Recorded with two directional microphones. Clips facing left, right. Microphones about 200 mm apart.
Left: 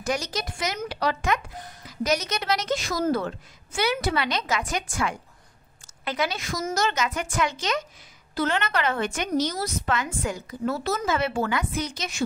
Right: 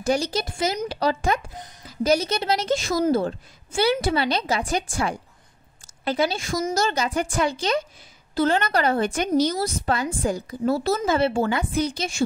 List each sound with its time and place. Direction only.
0.0 s a woman's voice: 30° right (ahead or behind)